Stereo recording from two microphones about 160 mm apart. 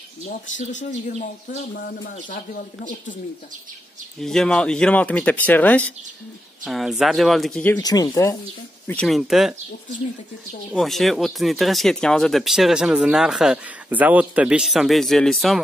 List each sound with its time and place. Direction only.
0.6 s speech: 50° left (ahead or behind)
4.2 s speech: 5° left (ahead or behind)
6.6 s speech: centre (ahead or behind)
7.6 s speech: 20° left (ahead or behind)
8.8 s speech: 5° left (ahead or behind)
10.7 s speech: centre (ahead or behind)